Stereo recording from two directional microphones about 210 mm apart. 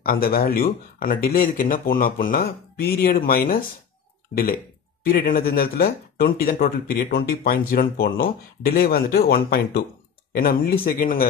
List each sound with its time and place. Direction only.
0.0 s speech: 45° left (ahead or behind)
5.0 s speech: 45° left (ahead or behind)